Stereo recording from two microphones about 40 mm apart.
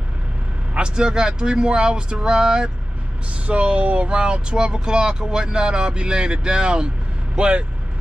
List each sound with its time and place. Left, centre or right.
0.7 s speech: right